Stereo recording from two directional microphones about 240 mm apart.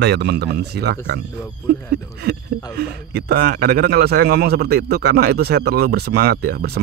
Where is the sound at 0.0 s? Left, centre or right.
Right.